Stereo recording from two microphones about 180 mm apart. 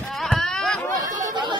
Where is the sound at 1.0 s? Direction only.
25° right (ahead or behind).